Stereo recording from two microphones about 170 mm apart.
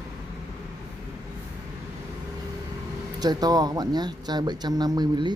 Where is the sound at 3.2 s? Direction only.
25° right (ahead or behind).